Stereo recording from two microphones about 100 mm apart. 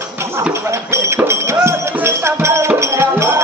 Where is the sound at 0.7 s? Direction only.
30° right (ahead or behind).